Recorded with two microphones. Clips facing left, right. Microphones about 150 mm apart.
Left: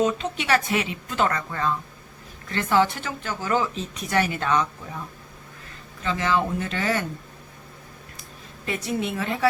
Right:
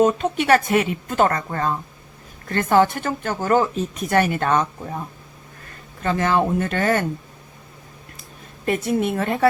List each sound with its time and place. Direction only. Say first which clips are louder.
0.0 s a woman's voice: right 6 dB; 50° right (ahead or behind)
8.6 s a woman's voice: right 6 dB; 50° right (ahead or behind)